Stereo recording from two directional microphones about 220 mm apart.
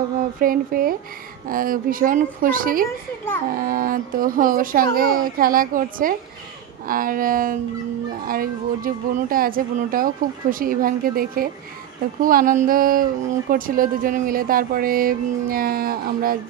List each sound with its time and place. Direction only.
0.4 s a woman's voice: 40° right (ahead or behind)